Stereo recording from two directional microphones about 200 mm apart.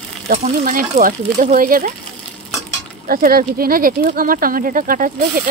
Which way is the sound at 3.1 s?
45° right (ahead or behind).